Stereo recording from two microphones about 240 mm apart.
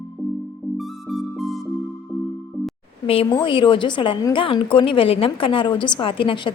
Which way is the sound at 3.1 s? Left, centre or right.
Centre.